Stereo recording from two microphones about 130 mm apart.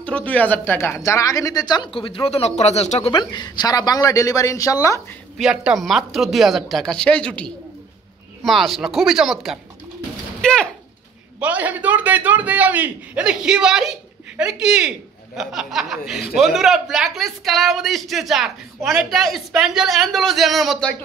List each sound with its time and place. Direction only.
0.0 s speech: 10° left (ahead or behind); by 3.2 s 50° left (ahead or behind)
3.2 s speech: 30° left (ahead or behind)
5.4 s a woman's voice: 5° right (ahead or behind)
11.3 s a man's voice: 10° right (ahead or behind)